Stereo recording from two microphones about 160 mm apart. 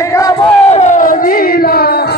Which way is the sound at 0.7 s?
45° left (ahead or behind).